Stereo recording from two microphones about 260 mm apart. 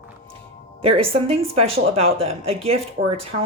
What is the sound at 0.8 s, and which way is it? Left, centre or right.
Speech, right.